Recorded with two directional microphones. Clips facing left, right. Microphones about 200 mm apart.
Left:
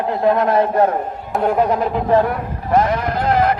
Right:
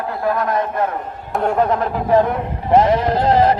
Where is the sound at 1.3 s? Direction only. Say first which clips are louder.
Left 1 dB; 5° left (ahead or behind).